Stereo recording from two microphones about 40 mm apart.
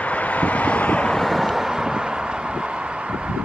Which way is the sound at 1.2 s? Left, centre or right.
Centre.